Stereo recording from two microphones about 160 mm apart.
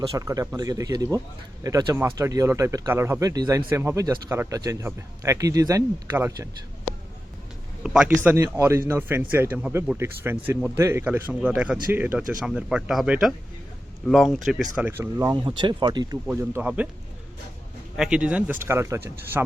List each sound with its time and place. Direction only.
0.1 s speech: 20° right (ahead or behind)
7.9 s speech: 5° right (ahead or behind)
14.8 s speech: 15° right (ahead or behind)
15.4 s speech: 30° right (ahead or behind)
16.2 s speech: 15° right (ahead or behind)
17.9 s speech: 5° right (ahead or behind)